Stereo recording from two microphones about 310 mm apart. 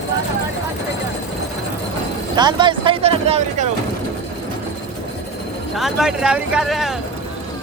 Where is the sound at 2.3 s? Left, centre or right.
Centre.